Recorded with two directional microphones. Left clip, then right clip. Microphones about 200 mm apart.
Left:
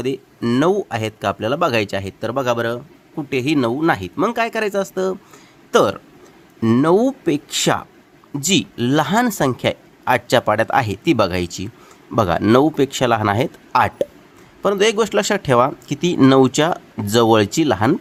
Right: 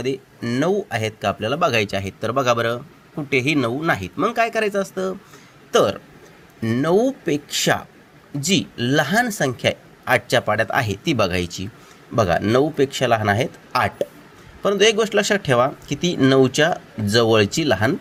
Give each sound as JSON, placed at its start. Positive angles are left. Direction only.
{"t": 0.0, "sound": "speech", "side_deg": 30}